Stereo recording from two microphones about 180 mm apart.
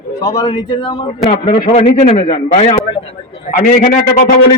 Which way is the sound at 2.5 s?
35° left (ahead or behind).